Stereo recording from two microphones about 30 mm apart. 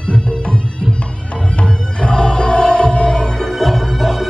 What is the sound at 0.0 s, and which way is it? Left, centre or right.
Music, left.